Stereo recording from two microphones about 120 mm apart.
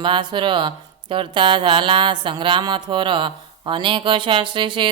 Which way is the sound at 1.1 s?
45° right (ahead or behind).